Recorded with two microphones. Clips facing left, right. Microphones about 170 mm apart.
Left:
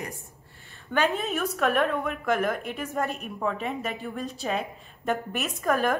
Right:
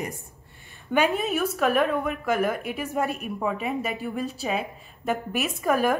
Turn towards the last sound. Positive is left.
turn(degrees=-5)  # may be behind; listen again after turning